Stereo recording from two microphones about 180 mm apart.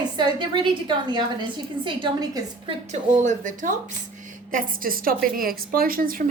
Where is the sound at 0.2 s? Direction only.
25° right (ahead or behind).